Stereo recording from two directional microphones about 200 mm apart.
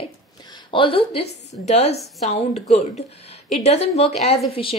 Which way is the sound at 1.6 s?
35° left (ahead or behind).